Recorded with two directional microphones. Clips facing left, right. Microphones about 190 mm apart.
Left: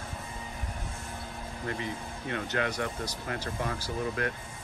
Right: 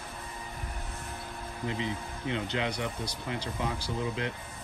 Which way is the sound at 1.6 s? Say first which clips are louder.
Right 2 dB; 20° right (ahead or behind).